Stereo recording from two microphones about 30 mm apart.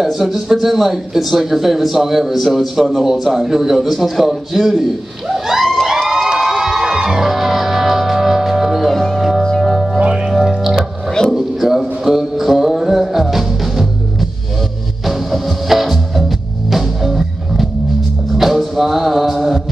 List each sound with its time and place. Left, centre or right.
0.0 s speech: centre
5.3 s a sound: centre
6.4 s music: centre
8.8 s music: centre
9.9 s music: right
11.3 s music: centre
15.0 s music: centre